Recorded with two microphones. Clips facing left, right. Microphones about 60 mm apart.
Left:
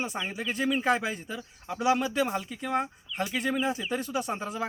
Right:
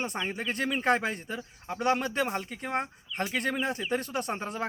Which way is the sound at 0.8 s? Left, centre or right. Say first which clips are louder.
Even; right.